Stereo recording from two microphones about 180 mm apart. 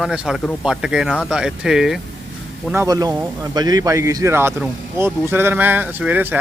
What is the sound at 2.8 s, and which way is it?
Speech, 20° right (ahead or behind).